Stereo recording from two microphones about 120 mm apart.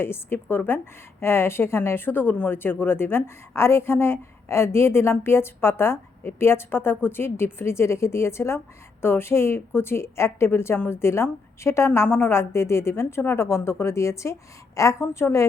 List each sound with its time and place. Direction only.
0.0 s a woman's voice: 20° left (ahead or behind)